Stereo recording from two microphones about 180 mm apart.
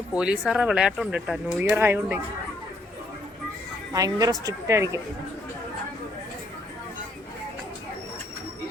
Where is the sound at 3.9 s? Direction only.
20° right (ahead or behind).